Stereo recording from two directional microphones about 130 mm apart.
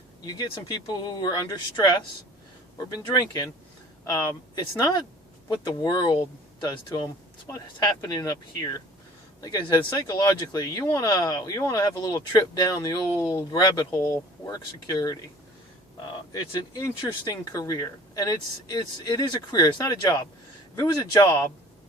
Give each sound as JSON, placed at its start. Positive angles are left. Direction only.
{"t": 0.3, "sound": "speech", "side_deg": 30}
{"t": 16.5, "sound": "speech", "side_deg": 30}